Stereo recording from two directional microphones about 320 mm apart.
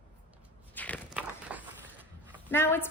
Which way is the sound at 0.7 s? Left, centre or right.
Centre.